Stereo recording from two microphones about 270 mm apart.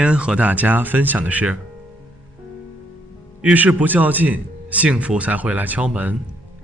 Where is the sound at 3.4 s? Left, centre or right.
Centre.